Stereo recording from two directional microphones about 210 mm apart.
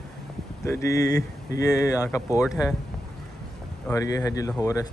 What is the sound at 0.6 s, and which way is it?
Speech, 15° left (ahead or behind).